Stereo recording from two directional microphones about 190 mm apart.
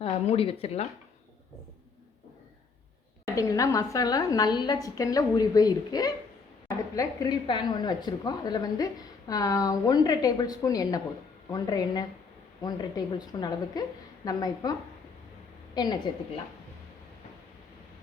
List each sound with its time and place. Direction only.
0.0 s speech: 30° left (ahead or behind)
3.3 s speech: 15° left (ahead or behind)
13.1 s a woman's voice: 20° left (ahead or behind)